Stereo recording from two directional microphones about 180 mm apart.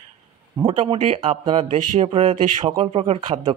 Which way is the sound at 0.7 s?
30° right (ahead or behind).